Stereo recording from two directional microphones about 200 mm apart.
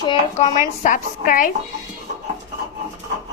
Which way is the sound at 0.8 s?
40° left (ahead or behind).